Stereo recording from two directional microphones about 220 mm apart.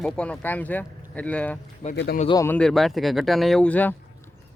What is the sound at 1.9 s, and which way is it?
Speech, 50° left (ahead or behind).